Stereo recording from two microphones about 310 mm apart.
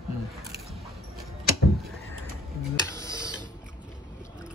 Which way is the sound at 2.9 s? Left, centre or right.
Centre.